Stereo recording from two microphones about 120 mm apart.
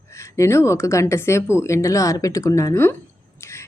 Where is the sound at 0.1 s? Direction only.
25° left (ahead or behind).